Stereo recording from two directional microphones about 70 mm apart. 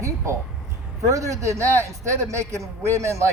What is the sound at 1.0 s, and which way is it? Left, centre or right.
Speech, right.